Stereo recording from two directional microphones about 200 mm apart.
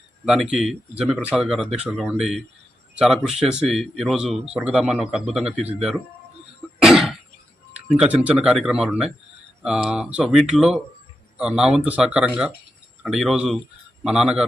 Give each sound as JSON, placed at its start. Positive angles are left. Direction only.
{"t": 0.6, "sound": "speech", "side_deg": 0}
{"t": 6.8, "sound": "throat clearing", "side_deg": 0}
{"t": 7.9, "sound": "speech", "side_deg": -5}